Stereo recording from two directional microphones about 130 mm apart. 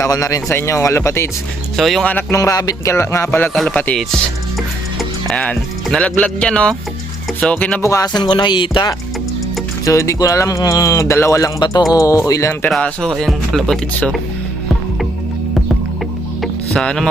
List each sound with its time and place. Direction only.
0.0 s speech: 25° left (ahead or behind)
1.7 s speech: centre (ahead or behind)
2.3 s speech: 25° left (ahead or behind)
3.5 s speech: centre (ahead or behind)
7.8 s speech: 25° left (ahead or behind)
9.8 s speech: 25° left (ahead or behind)
12.7 s speech: 5° left (ahead or behind)
16.4 s music: 5° left (ahead or behind)